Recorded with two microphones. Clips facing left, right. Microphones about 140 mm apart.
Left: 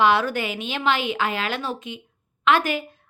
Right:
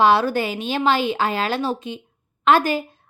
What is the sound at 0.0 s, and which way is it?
A woman's voice, 35° right (ahead or behind).